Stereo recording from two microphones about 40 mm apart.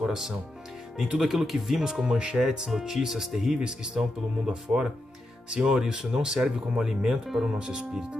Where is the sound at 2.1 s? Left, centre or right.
Right.